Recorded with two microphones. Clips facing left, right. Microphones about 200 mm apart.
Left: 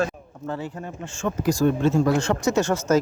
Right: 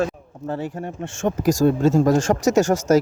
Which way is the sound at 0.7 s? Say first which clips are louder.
Right 5 dB; 30° right (ahead or behind).